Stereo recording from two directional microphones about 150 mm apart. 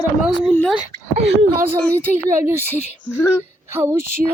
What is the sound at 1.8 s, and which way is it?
Speech, 10° left (ahead or behind).